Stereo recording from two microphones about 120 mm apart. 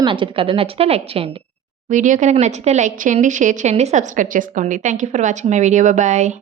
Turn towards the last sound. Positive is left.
turn(degrees=-80)